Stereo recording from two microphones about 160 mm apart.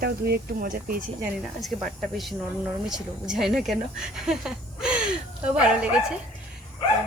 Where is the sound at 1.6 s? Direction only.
Centre (ahead or behind).